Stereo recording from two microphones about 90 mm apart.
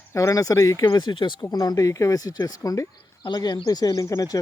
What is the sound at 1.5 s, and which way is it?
Speech, 40° left (ahead or behind).